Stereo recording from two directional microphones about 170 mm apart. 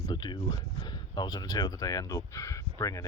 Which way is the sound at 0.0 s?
25° left (ahead or behind).